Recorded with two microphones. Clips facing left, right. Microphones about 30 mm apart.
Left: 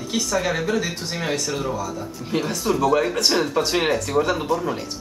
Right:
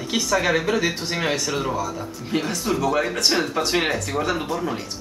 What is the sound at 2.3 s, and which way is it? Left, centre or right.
Speech, centre.